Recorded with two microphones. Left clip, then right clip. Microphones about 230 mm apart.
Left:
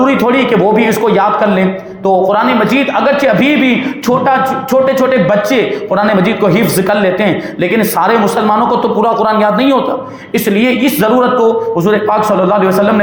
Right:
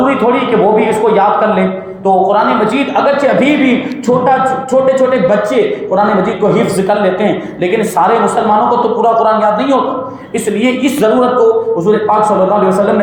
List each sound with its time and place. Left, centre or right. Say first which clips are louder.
0.8 s speech: right 1 dB; left
6.5 s speech: even; left
9.0 s a man's voice: right 1 dB; left
10.6 s a capella: right 1 dB; left